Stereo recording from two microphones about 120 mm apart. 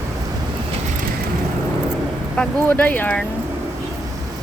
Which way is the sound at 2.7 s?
15° left (ahead or behind).